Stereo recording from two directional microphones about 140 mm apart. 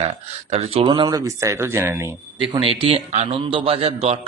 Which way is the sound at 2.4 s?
40° right (ahead or behind).